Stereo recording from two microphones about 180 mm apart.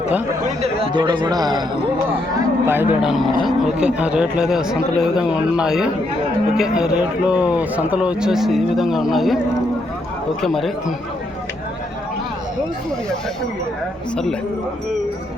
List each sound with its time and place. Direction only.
0.4 s a man's voice: 35° right (ahead or behind); by 9.4 s centre (ahead or behind)
10.4 s speech: centre (ahead or behind)